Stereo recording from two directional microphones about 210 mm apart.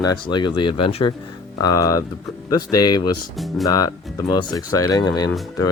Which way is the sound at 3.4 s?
Centre (ahead or behind).